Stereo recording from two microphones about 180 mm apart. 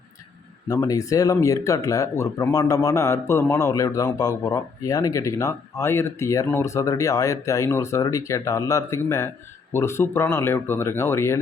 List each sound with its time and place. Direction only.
0.7 s speech: 20° left (ahead or behind)